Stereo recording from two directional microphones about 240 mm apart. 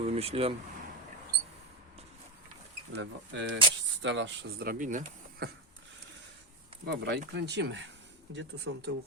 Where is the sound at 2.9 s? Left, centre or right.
Right.